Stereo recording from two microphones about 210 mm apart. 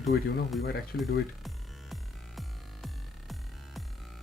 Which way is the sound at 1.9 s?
Centre (ahead or behind).